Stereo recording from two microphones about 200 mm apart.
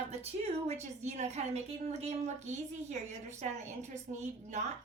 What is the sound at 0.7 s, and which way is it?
A woman's voice, 35° right (ahead or behind).